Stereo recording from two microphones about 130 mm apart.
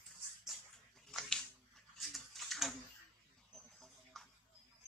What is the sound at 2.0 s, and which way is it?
Tick-tock, centre (ahead or behind).